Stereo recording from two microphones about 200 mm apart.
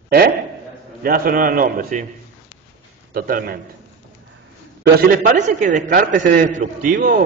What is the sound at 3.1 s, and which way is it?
Speech, 45° right (ahead or behind).